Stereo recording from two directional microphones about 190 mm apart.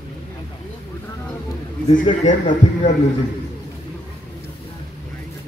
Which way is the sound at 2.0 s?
40° left (ahead or behind).